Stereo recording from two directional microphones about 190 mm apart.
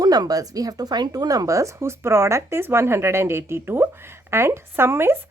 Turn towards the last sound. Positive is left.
turn(degrees=-15)  # may be behind; listen again after turning